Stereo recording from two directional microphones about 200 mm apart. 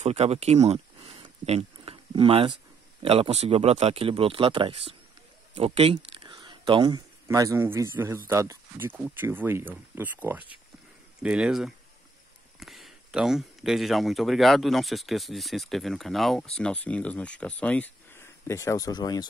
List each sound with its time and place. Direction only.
0.0 s speech: 30° right (ahead or behind)
1.2 s a sound: 30° right (ahead or behind)
3.0 s speech: 30° right (ahead or behind); by 19.2 s 20° left (ahead or behind)